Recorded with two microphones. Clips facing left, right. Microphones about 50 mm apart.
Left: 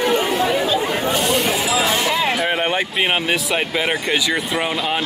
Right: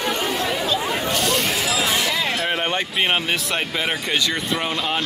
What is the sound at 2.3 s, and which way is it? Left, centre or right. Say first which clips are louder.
Speech: left 3 dB; centre.